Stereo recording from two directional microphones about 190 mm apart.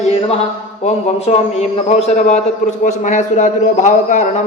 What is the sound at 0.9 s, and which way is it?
Speech, 35° left (ahead or behind).